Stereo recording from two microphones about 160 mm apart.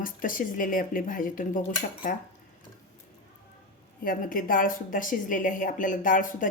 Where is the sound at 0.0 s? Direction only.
60° left (ahead or behind).